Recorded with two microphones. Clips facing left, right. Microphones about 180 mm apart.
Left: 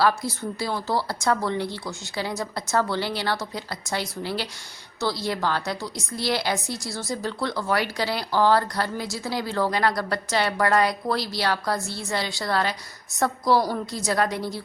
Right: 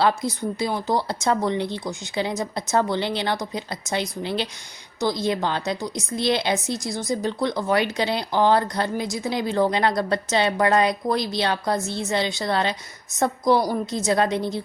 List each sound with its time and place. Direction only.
0.0 s a woman's voice: 20° right (ahead or behind)